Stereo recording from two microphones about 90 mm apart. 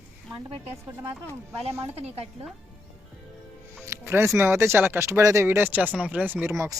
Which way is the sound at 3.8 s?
30° right (ahead or behind).